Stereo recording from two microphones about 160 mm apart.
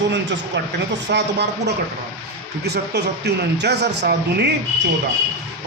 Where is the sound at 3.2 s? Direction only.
90° right.